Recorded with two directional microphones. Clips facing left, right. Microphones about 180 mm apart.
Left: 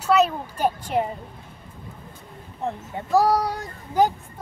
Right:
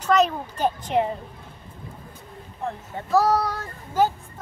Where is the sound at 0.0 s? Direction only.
10° left (ahead or behind).